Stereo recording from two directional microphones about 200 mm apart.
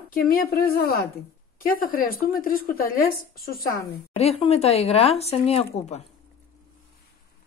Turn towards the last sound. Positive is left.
turn(degrees=35)  # may be behind; listen again after turning